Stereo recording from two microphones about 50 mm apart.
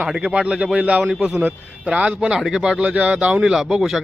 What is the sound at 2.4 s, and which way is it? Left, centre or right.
Speech, centre.